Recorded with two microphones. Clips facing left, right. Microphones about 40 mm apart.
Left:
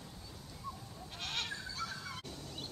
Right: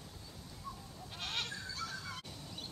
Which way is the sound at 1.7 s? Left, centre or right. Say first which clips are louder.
Left 1 dB; centre.